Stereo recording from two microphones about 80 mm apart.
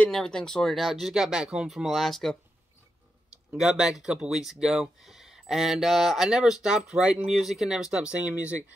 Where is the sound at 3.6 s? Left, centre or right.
Centre.